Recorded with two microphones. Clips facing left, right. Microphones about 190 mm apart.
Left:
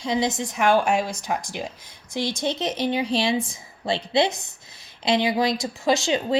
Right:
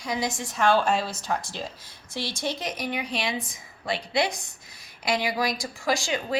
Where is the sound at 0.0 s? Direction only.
25° left (ahead or behind).